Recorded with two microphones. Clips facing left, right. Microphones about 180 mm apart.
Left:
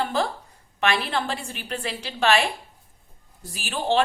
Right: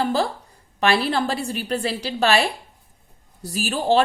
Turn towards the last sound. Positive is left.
turn(degrees=-40)  # may be behind; listen again after turning